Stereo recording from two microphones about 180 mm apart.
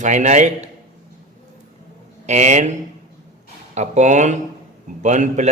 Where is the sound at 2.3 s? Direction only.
40° right (ahead or behind).